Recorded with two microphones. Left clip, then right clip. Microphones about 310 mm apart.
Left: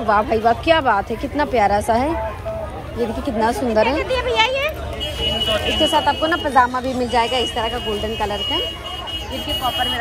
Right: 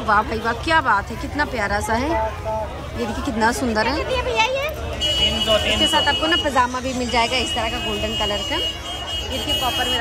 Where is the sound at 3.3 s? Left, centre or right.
Centre.